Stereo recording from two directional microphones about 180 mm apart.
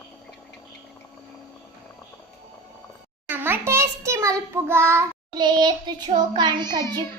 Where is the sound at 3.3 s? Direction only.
10° right (ahead or behind).